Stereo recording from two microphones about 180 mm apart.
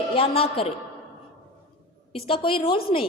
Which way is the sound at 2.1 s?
30° left (ahead or behind).